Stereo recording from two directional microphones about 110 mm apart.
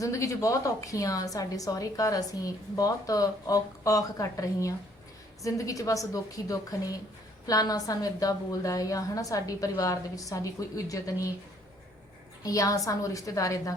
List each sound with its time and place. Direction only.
0.0 s a woman's voice: 30° left (ahead or behind)
12.4 s a woman's voice: 30° left (ahead or behind)